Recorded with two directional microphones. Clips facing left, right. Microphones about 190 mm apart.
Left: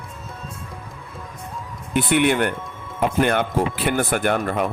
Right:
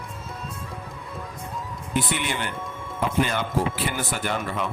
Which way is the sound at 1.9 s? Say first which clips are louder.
Left 9 dB; 60° left (ahead or behind).